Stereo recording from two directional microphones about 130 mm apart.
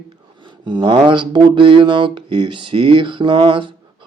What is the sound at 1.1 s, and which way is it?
Speech, 40° right (ahead or behind).